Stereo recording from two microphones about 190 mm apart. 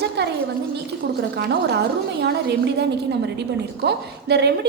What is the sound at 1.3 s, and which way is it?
A woman's voice, 60° right (ahead or behind).